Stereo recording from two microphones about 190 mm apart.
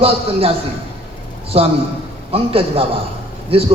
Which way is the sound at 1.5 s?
30° right (ahead or behind).